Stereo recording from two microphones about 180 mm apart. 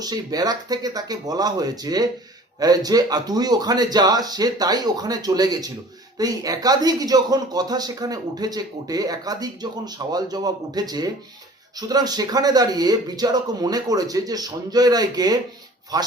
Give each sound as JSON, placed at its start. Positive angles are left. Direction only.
{"t": 0.0, "sound": "speech", "side_deg": -20}